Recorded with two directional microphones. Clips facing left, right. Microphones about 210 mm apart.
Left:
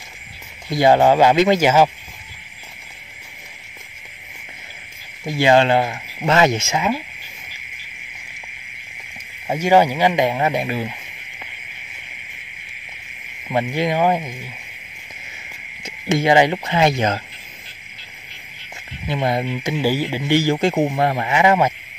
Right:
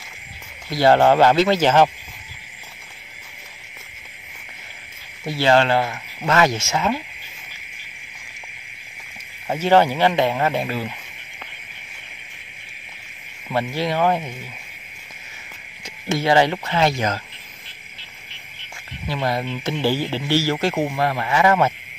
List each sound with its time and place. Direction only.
0.7 s speech: 15° left (ahead or behind)
5.4 s speech: 15° left (ahead or behind)
9.5 s speech: 10° left (ahead or behind)
13.5 s speech: 15° left (ahead or behind)
15.8 s speech: 20° left (ahead or behind)
19.0 s speech: 20° left (ahead or behind)